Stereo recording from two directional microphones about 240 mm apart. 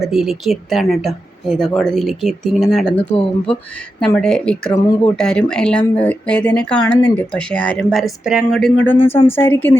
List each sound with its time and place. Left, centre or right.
0.0 s speech: centre
3.2 s speech: left
4.0 s a woman's voice: centre